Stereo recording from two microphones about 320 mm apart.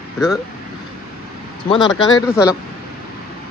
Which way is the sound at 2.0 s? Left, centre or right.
Centre.